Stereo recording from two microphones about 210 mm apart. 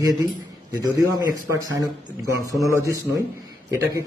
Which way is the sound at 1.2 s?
15° right (ahead or behind).